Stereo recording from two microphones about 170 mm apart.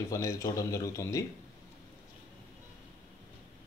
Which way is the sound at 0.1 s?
20° left (ahead or behind).